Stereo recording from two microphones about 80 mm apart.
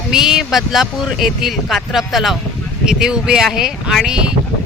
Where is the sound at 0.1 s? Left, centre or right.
Centre.